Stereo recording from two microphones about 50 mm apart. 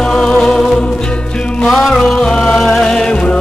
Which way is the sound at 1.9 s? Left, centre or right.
Centre.